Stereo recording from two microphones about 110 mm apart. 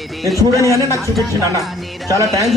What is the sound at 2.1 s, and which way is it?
Speech, 30° right (ahead or behind).